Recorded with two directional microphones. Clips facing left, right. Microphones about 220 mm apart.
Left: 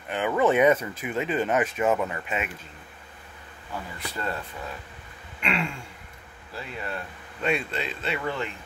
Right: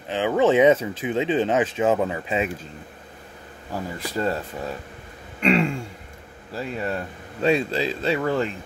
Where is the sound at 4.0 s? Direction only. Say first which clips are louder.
Right 8 dB; 40° right (ahead or behind).